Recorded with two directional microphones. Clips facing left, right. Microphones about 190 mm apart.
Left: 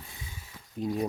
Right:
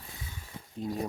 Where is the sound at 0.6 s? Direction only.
25° right (ahead or behind).